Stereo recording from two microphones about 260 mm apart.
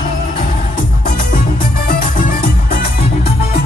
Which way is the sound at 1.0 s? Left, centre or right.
Left.